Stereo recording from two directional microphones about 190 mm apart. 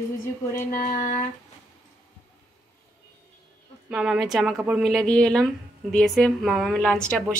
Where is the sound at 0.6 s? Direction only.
45° left (ahead or behind).